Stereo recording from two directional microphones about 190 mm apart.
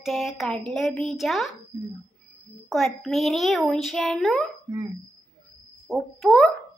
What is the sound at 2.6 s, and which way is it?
Speech, centre (ahead or behind).